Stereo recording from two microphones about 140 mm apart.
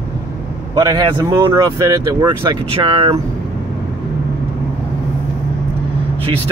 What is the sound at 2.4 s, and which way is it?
Speech, 40° right (ahead or behind).